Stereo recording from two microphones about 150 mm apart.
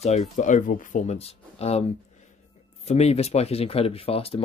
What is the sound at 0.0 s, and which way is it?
Speech, 45° left (ahead or behind).